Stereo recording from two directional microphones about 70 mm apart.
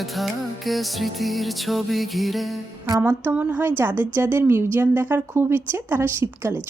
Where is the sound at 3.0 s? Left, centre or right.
Right.